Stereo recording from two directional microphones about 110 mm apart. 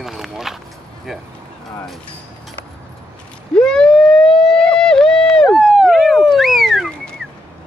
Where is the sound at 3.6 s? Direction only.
5° left (ahead or behind).